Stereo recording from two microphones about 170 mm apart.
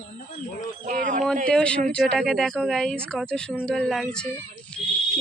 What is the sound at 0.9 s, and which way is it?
Speech, 50° right (ahead or behind).